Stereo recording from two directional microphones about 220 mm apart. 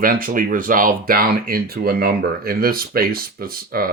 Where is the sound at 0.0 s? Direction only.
40° right (ahead or behind).